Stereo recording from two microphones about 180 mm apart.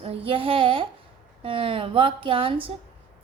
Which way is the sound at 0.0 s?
30° right (ahead or behind).